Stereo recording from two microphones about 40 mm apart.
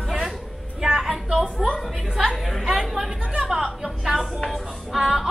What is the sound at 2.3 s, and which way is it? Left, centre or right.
Chatter, centre.